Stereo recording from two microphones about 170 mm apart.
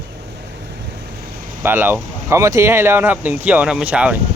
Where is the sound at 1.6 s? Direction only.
10° right (ahead or behind).